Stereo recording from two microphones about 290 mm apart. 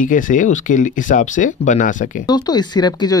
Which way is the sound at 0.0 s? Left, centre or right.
Left.